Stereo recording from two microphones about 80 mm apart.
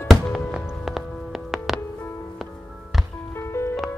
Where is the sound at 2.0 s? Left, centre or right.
Left.